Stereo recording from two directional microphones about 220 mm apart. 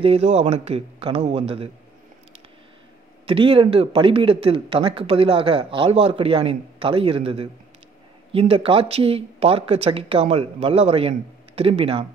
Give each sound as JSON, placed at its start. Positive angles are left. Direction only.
{"t": 0.0, "sound": "speech", "side_deg": -25}
{"t": 3.3, "sound": "speech", "side_deg": -25}